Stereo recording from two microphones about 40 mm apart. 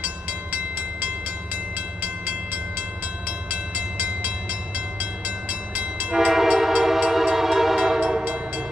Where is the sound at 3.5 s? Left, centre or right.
Right.